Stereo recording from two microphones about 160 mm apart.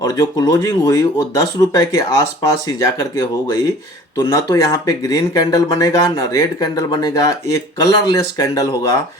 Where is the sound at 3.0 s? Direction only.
20° left (ahead or behind).